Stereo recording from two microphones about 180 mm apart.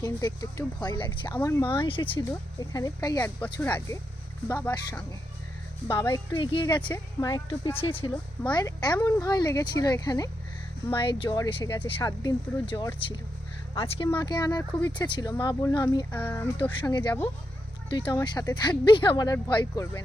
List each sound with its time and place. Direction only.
0.0 s speech: 15° left (ahead or behind)
1.8 s speech: 30° left (ahead or behind); by 4.7 s 10° left (ahead or behind)
5.9 s speech: 15° left (ahead or behind)
8.1 s speech: 20° left (ahead or behind)
14.7 s speech: 15° left (ahead or behind)
14.9 s speech: 25° left (ahead or behind)
16.1 s speech: 10° left (ahead or behind)
17.8 s speech: 25° left (ahead or behind)